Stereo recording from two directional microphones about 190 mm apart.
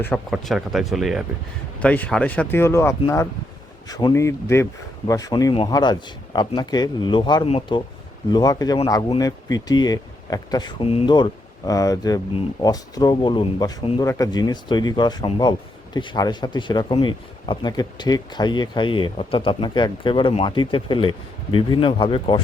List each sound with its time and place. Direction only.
0.0 s speech: 5° left (ahead or behind); by 22.4 s 25° left (ahead or behind)